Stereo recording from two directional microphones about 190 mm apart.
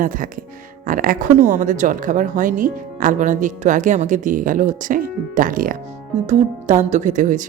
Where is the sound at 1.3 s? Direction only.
15° right (ahead or behind).